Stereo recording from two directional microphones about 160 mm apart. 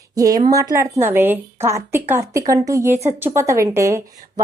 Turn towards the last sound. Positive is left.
turn(degrees=-20)  # may be behind; listen again after turning